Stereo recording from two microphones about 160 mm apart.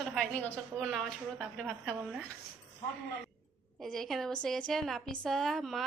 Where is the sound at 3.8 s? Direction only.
Centre (ahead or behind).